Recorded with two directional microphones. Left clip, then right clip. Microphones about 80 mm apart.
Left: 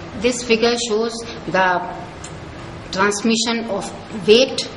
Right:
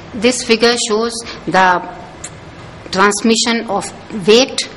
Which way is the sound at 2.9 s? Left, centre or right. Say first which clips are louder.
Right 6 dB; right.